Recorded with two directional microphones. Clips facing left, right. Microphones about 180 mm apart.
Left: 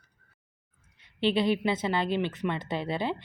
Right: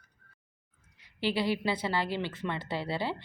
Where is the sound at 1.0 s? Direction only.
20° left (ahead or behind).